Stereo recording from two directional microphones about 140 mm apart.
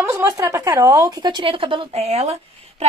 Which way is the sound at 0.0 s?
15° right (ahead or behind).